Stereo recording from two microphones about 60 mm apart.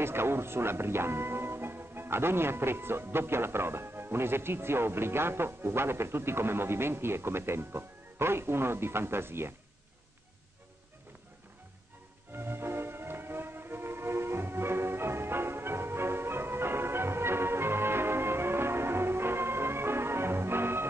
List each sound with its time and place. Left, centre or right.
0.0 s speech: right
12.4 s music: right